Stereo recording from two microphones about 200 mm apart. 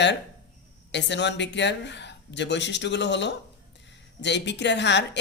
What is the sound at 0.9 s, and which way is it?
Speech, 60° left (ahead or behind).